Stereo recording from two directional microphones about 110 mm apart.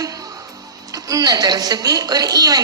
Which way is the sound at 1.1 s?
35° right (ahead or behind).